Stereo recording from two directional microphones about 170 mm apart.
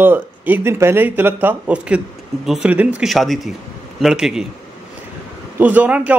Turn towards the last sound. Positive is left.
turn(degrees=-10)  # may be behind; listen again after turning